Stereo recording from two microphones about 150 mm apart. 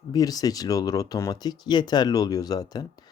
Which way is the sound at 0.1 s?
25° left (ahead or behind).